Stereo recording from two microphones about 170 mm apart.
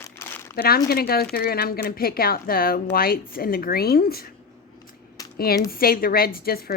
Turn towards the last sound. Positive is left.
turn(degrees=60)  # may be behind; listen again after turning